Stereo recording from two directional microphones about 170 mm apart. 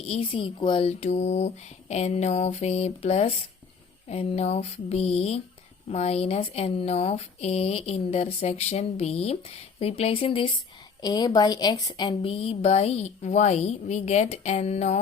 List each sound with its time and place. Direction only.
0.1 s a woman's voice: 35° left (ahead or behind)